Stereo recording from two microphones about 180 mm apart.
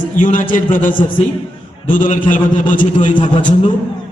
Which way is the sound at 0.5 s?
50° left (ahead or behind).